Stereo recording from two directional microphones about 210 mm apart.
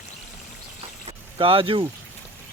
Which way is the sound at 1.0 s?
25° right (ahead or behind).